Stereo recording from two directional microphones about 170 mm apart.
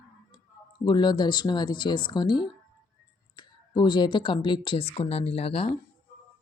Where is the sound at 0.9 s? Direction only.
25° left (ahead or behind).